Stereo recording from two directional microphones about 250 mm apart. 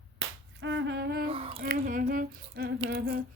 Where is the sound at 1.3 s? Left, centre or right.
Right.